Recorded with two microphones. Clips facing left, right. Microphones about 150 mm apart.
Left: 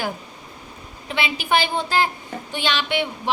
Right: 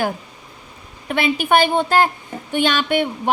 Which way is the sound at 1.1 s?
50° right (ahead or behind).